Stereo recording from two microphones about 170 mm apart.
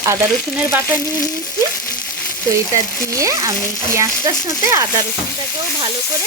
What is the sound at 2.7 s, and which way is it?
Speech, 20° right (ahead or behind).